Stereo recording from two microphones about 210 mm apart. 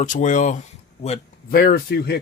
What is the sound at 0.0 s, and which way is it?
Speech, 35° left (ahead or behind).